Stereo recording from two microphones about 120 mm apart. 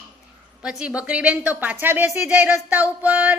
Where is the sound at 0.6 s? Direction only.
5° right (ahead or behind).